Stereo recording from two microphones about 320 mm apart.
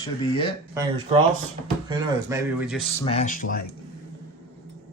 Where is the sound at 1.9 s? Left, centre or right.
Centre.